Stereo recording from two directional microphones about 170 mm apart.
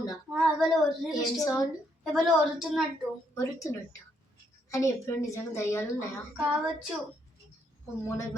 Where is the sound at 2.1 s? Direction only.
Centre (ahead or behind).